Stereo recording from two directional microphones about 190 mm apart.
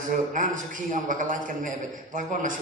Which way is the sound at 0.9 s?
45° right (ahead or behind).